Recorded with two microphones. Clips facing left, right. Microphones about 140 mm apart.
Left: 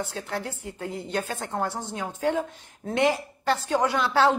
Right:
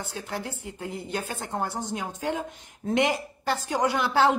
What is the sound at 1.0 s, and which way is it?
Speech, 10° right (ahead or behind).